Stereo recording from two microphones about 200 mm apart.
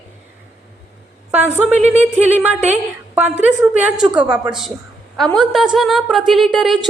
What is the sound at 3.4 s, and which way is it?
A woman's voice, 10° right (ahead or behind).